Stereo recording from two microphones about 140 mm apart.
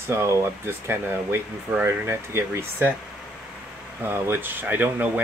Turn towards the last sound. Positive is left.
turn(degrees=-10)  # may be behind; listen again after turning